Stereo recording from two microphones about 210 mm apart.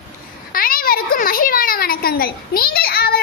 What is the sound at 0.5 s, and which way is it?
A child's voice, 45° left (ahead or behind).